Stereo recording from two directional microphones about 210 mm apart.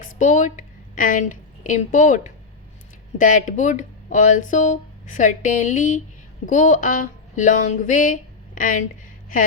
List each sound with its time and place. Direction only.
0.0 s a woman's voice: 40° left (ahead or behind)